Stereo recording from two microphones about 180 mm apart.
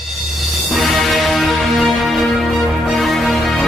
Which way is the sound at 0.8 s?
Centre (ahead or behind).